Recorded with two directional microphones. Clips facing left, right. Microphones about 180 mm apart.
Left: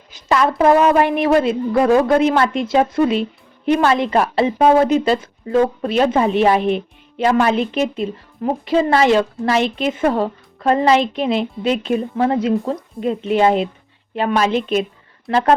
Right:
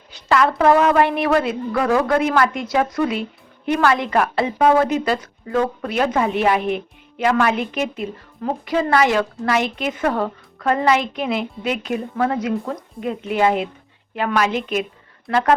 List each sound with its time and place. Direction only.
0.1 s a woman's voice: 20° left (ahead or behind)